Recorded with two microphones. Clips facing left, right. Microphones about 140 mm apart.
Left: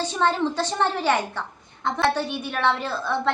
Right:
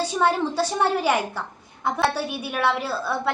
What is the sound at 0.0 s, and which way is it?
A woman's voice, 10° right (ahead or behind).